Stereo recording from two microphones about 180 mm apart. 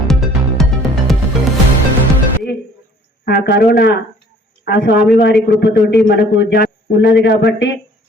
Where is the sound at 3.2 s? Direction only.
65° left (ahead or behind).